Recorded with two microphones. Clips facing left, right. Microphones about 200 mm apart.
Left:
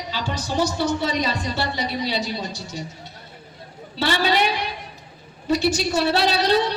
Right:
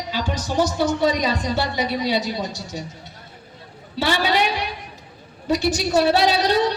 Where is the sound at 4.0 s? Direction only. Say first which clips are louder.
Even; 15° right (ahead or behind).